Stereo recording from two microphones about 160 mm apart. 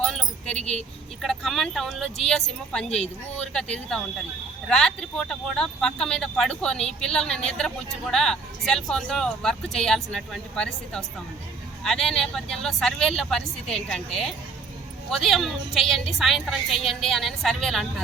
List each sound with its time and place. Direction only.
0.0 s speech: 5° left (ahead or behind)
15.1 s speech: centre (ahead or behind)